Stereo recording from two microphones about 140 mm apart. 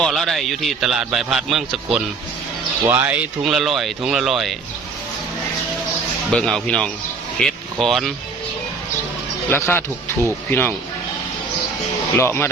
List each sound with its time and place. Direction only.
0.0 s a man's voice: centre (ahead or behind)
2.8 s speech: 20° right (ahead or behind)
3.4 s a man's voice: 5° right (ahead or behind)
6.3 s speech: 5° left (ahead or behind)
9.5 s speech: 15° left (ahead or behind)
12.1 s speech: 20° left (ahead or behind)